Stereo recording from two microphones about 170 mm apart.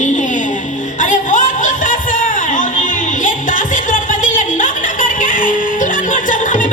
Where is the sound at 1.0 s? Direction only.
50° left (ahead or behind).